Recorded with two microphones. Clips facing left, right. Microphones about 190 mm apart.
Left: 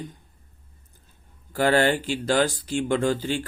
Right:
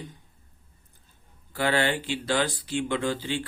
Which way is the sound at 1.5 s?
45° left (ahead or behind).